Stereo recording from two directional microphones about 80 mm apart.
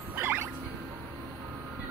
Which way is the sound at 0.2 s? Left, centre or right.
Right.